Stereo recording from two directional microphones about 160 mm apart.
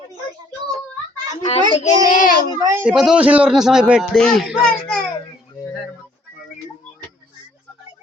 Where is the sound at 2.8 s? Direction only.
5° right (ahead or behind).